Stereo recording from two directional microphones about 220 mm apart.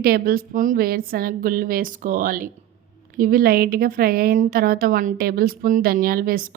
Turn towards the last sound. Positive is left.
turn(degrees=-40)  # may be behind; listen again after turning